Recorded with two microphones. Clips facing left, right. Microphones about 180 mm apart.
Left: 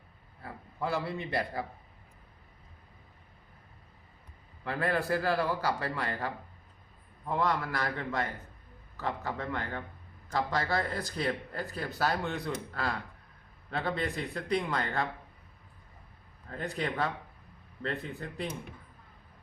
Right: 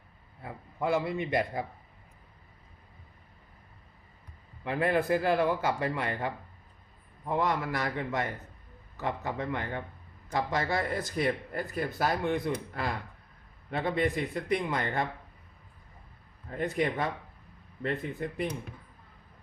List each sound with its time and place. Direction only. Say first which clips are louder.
0.4 s a man's voice: right 4 dB; 20° right (ahead or behind)
4.6 s a man's voice: right 3 dB; 15° right (ahead or behind)
16.5 s a man's voice: right 5 dB; 15° right (ahead or behind)